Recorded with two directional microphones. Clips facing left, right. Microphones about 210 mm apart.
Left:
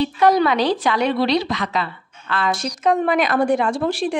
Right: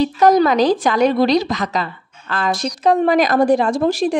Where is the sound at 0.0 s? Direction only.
40° right (ahead or behind).